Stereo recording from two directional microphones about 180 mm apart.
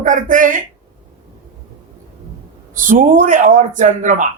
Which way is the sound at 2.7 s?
45° right (ahead or behind).